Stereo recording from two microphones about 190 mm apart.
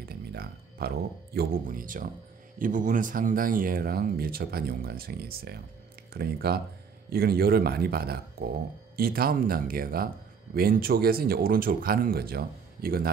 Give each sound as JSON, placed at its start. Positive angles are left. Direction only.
{"t": 0.1, "sound": "speech", "side_deg": -55}